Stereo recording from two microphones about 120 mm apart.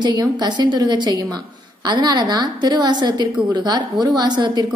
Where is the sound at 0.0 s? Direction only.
35° right (ahead or behind).